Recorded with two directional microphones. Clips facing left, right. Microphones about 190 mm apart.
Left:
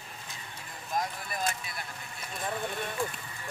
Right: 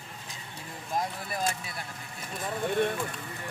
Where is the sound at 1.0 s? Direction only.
30° right (ahead or behind).